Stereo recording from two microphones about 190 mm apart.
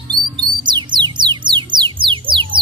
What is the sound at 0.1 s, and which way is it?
Music, 25° right (ahead or behind).